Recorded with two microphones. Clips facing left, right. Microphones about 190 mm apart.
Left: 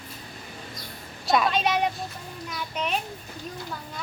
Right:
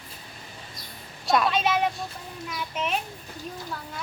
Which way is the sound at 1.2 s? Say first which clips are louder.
Even; centre (ahead or behind).